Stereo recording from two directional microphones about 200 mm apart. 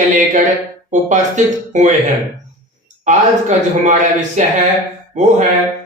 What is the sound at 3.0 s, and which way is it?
A man's voice, 35° right (ahead or behind).